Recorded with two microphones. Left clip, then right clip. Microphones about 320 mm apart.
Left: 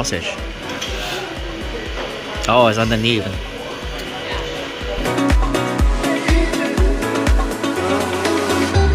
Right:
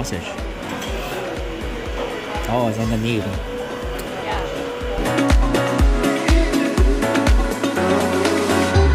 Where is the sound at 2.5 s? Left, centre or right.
Left.